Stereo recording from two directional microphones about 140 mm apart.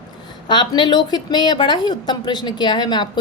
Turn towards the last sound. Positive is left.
turn(degrees=35)  # may be behind; listen again after turning